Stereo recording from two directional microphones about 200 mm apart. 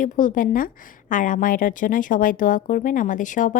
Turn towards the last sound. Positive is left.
turn(degrees=40)  # may be behind; listen again after turning